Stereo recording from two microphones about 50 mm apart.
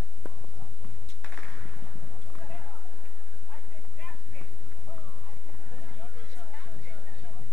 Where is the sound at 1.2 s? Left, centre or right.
Centre.